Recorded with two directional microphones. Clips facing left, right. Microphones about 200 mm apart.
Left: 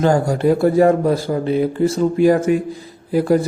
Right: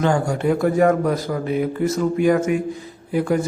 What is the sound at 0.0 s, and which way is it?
Speech, 35° left (ahead or behind).